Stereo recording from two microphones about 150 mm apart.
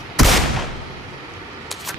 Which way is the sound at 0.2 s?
Centre (ahead or behind).